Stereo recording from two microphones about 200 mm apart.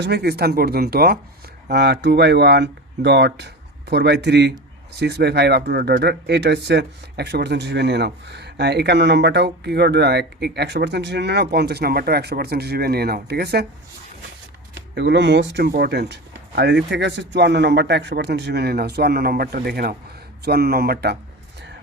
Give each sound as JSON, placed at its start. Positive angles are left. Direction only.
{"t": 0.0, "sound": "speech", "side_deg": -55}
{"t": 14.8, "sound": "speech", "side_deg": -60}